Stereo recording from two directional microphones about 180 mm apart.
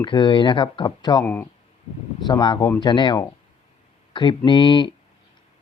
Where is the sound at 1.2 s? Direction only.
10° left (ahead or behind).